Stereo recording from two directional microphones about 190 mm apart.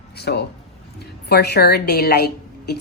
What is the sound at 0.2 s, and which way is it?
A woman's voice, 60° left (ahead or behind).